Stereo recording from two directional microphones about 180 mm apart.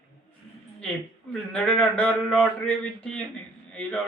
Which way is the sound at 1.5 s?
5° left (ahead or behind).